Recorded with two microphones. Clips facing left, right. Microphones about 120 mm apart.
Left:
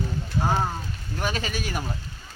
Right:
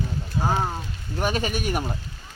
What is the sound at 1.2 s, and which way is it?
Speech, 45° right (ahead or behind).